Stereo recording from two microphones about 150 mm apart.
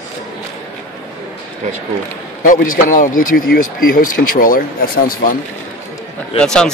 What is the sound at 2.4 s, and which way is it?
Speech, 65° left (ahead or behind).